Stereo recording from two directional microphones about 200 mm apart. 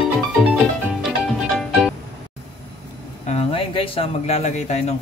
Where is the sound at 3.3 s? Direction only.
30° left (ahead or behind).